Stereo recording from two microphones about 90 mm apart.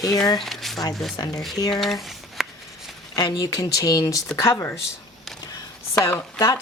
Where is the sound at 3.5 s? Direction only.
40° left (ahead or behind).